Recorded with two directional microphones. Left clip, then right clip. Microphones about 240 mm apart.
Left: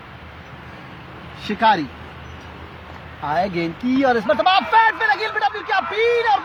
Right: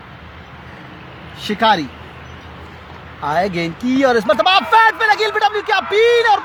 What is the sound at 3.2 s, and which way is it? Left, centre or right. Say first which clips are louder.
Speech: right 3 dB; right.